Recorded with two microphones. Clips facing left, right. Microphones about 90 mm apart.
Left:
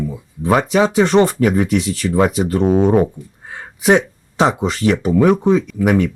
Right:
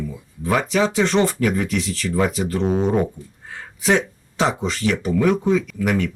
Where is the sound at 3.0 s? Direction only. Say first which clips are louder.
Left 6 dB; 30° left (ahead or behind).